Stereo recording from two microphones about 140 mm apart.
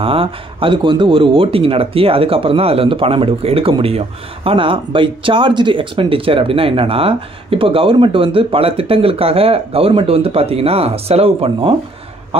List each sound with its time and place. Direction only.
0.0 s speech: 40° right (ahead or behind)